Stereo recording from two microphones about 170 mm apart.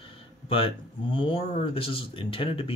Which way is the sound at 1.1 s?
30° left (ahead or behind).